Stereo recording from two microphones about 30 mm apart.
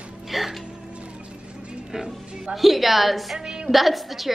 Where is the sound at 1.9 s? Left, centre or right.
Right.